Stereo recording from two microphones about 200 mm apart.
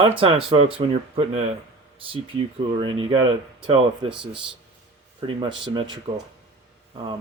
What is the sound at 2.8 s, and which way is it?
Speech, 25° right (ahead or behind).